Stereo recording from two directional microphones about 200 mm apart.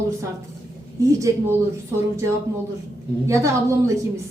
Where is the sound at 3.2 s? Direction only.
15° right (ahead or behind).